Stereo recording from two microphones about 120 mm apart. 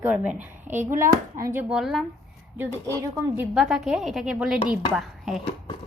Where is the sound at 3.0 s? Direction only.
25° right (ahead or behind).